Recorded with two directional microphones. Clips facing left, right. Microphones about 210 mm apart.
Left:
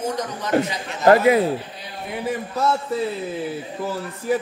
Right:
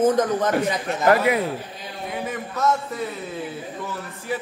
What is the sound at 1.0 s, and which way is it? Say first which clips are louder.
Speech: left 4 dB; 25° left (ahead or behind).